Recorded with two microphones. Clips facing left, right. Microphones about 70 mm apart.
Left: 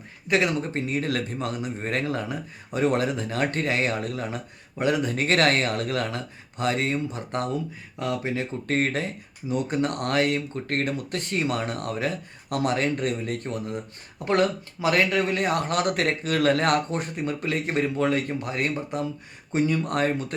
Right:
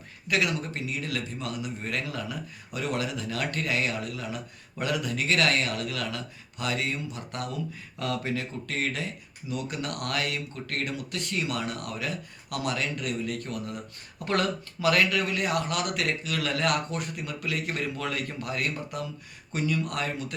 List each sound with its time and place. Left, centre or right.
0.3 s speech: left
4.8 s speech: left
7.9 s speech: left
8.6 s speech: left